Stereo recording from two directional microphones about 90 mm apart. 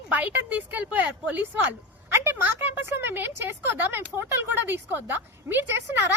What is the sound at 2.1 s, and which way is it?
A woman's voice, 25° right (ahead or behind).